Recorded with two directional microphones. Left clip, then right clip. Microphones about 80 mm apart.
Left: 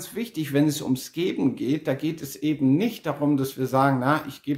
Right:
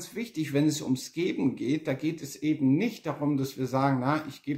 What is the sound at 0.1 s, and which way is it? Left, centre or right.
Speech, left.